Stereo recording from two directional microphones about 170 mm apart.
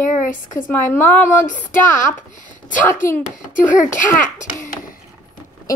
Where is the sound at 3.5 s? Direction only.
50° left (ahead or behind).